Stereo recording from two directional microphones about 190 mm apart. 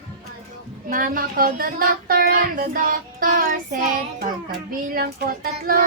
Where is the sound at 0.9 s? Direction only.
45° right (ahead or behind).